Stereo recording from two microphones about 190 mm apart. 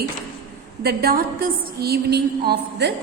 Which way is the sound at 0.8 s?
50° right (ahead or behind).